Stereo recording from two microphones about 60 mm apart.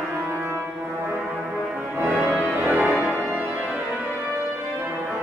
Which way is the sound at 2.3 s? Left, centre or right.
Right.